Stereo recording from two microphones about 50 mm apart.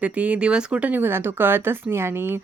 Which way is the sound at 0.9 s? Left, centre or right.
Right.